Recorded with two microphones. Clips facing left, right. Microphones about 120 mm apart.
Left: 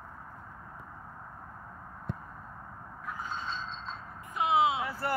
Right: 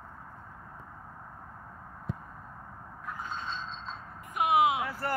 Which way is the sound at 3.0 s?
Centre (ahead or behind).